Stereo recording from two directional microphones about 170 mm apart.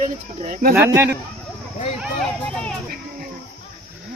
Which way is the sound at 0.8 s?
15° right (ahead or behind).